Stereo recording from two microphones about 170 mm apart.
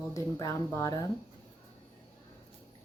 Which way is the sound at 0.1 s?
20° left (ahead or behind).